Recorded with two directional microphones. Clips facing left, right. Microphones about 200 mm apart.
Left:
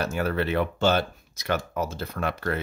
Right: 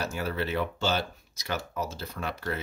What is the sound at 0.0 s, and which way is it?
Speech, 55° left (ahead or behind).